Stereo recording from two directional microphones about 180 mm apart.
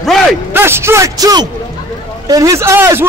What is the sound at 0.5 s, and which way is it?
A man's voice, 15° right (ahead or behind).